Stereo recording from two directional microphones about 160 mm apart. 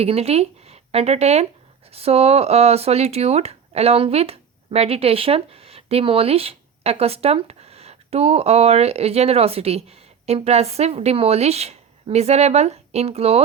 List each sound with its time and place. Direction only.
0.0 s speech: 40° right (ahead or behind)